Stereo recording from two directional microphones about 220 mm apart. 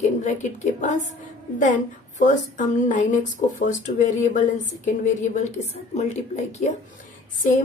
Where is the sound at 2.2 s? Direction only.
35° left (ahead or behind).